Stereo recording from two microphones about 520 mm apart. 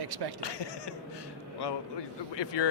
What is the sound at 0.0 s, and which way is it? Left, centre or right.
Speech, right.